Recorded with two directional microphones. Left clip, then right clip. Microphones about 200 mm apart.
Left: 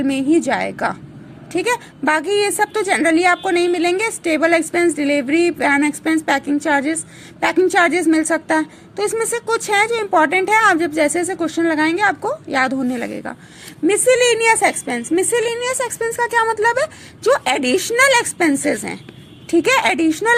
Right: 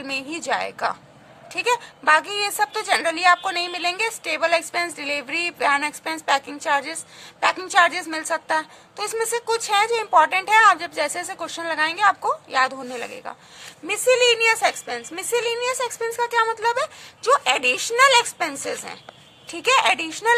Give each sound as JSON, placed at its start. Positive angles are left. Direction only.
{"t": 0.0, "sound": "a woman's voice", "side_deg": 10}